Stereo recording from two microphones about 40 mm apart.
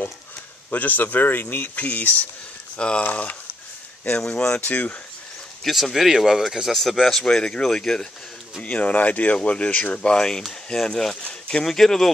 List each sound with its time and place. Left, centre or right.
0.7 s speech: left
1.8 s speech: left
4.3 s speech: left
4.6 s speech: left
5.6 s speech: centre
6.7 s speech: centre
7.2 s speech: left
8.6 s speech: left
9.9 s speech: centre
11.2 s a sound: left
11.6 s speech: centre